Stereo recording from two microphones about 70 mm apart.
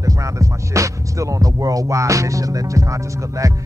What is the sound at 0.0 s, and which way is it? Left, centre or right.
Music, right.